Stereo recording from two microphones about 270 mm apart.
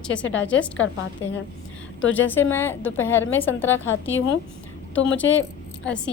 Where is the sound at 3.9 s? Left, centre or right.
Left.